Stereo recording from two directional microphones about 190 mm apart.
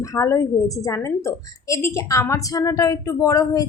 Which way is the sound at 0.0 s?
15° left (ahead or behind).